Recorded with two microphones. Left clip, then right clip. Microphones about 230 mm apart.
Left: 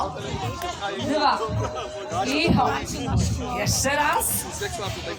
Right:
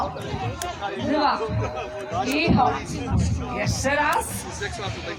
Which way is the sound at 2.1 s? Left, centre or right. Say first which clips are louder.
Right 1 dB; left.